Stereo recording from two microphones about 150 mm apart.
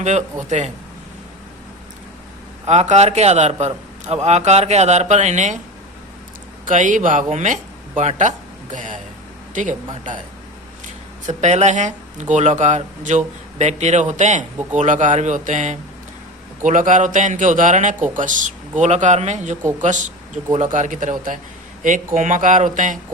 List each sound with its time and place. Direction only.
0.0 s speech: 50° right (ahead or behind)
2.6 s speech: 50° right (ahead or behind)
6.7 s speech: 60° right (ahead or behind)
11.3 s speech: 50° right (ahead or behind)